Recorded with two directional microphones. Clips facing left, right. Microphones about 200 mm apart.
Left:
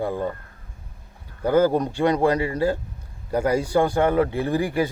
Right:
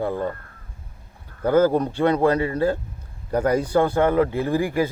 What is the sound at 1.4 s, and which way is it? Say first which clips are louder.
Speech: right 1 dB; 15° left (ahead or behind).